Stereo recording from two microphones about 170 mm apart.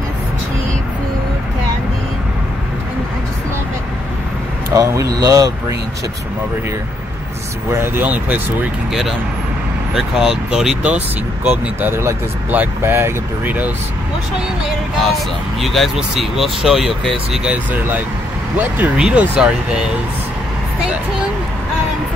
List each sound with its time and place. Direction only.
4.7 s speech: 20° right (ahead or behind)
7.8 s speech: 10° right (ahead or behind)
9.9 s speech: 5° right (ahead or behind)
15.6 s speech: centre (ahead or behind)